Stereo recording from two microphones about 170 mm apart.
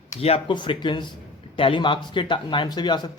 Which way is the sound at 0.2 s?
35° left (ahead or behind).